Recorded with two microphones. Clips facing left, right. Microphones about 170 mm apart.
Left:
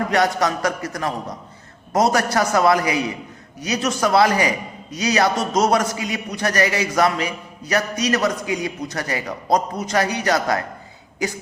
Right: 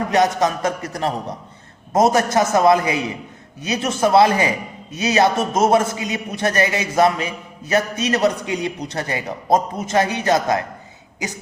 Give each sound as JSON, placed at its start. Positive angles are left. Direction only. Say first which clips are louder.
{"t": 0.1, "sound": "a man's voice", "louder": "right 4 dB", "side_deg": -20}
{"t": 1.9, "sound": "a man's voice", "louder": "right 2 dB", "side_deg": -25}